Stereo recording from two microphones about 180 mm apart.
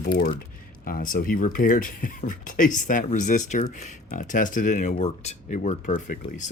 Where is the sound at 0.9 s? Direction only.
50° left (ahead or behind).